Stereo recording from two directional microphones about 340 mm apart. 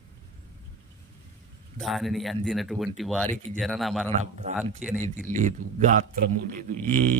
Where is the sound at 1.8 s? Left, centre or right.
Centre.